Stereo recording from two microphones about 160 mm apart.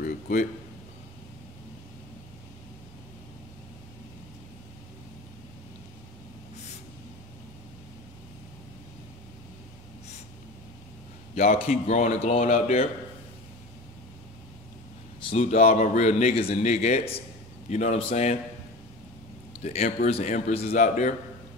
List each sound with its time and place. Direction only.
0.0 s a sound: 55° left (ahead or behind)
11.3 s a man's voice: 40° left (ahead or behind)
15.3 s a man's voice: 45° left (ahead or behind)
19.6 s a man's voice: 45° left (ahead or behind)